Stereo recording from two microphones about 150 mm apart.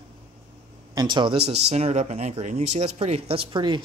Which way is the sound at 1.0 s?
30° right (ahead or behind).